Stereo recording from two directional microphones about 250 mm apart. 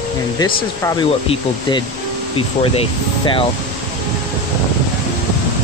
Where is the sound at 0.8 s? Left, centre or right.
Centre.